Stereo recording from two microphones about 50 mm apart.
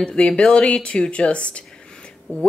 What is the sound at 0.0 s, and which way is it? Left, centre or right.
Speech, centre.